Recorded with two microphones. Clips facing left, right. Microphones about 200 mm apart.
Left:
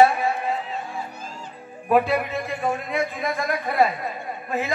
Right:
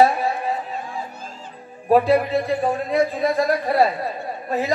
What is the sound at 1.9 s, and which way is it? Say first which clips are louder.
A man's voice: right 4 dB; 35° right (ahead or behind).